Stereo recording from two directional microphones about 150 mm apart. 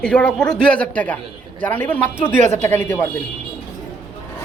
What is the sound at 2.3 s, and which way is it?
Speech, 55° right (ahead or behind).